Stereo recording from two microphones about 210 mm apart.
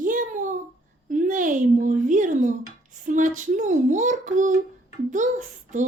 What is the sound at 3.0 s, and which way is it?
Child singing, 35° right (ahead or behind).